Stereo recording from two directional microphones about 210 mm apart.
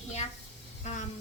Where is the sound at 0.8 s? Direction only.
35° left (ahead or behind).